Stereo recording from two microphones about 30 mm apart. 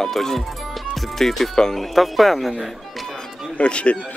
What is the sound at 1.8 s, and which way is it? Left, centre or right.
Speech, centre.